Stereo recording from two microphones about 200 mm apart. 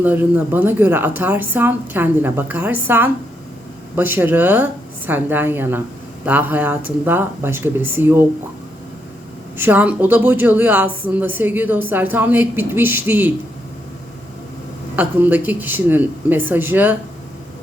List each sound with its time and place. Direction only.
0.0 s speech: 10° right (ahead or behind)
9.6 s speech: 10° right (ahead or behind)
14.9 s speech: 10° right (ahead or behind)